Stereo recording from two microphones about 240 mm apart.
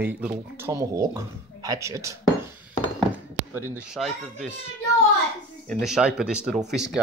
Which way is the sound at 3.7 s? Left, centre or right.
Centre.